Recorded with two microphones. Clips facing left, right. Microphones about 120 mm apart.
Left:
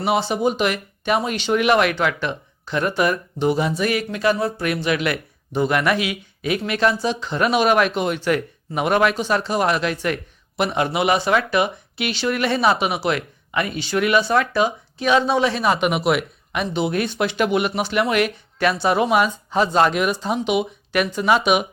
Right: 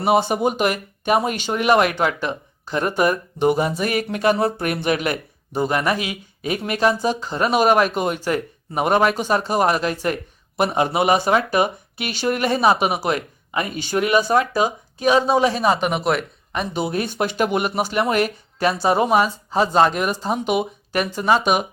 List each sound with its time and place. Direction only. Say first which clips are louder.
0.0 s speech: right 2 dB; 45° right (ahead or behind)
4.6 s speech: even; 45° right (ahead or behind)
15.8 s speech: left 1 dB; 5° left (ahead or behind)
16.5 s speech: left 1 dB; 35° right (ahead or behind)